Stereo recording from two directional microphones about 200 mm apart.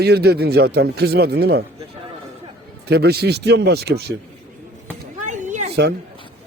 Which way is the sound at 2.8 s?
55° right (ahead or behind).